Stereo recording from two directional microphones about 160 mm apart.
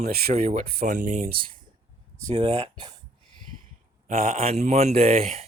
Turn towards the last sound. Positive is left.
turn(degrees=-40)  # may be behind; listen again after turning